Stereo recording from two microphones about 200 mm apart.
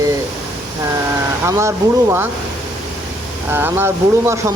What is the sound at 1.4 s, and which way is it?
Speech, 15° right (ahead or behind).